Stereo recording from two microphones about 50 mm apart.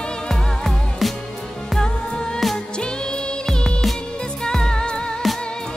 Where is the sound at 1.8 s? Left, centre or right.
Centre.